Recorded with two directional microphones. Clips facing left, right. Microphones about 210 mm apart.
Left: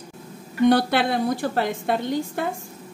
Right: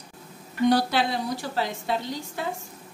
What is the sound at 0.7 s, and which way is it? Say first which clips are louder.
A woman's voice: left 3 dB; 60° left (ahead or behind).